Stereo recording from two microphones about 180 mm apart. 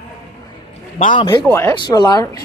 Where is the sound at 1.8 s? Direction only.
25° left (ahead or behind).